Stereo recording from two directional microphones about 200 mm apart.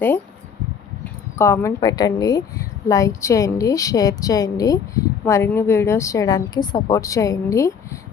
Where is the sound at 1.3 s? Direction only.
10° left (ahead or behind).